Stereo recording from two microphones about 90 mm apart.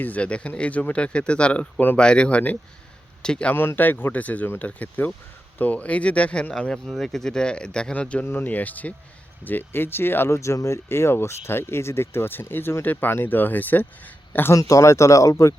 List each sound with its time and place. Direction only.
0.0 s speech: 15° left (ahead or behind)
3.5 s speech: 25° left (ahead or behind)
14.5 s speech: 35° left (ahead or behind)